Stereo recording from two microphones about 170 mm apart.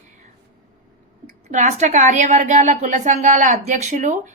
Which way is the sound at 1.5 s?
45° right (ahead or behind).